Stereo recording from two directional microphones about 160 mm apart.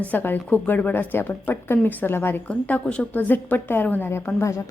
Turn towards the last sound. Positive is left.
turn(degrees=15)  # may be behind; listen again after turning